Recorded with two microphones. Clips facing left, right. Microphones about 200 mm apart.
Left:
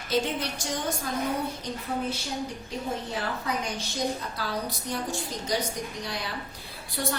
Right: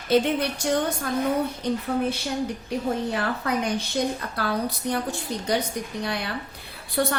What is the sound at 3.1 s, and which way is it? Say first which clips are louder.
A woman's voice: right 5 dB; 60° right (ahead or behind).